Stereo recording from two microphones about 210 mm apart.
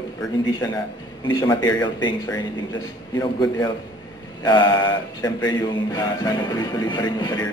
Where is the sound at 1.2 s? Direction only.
15° left (ahead or behind).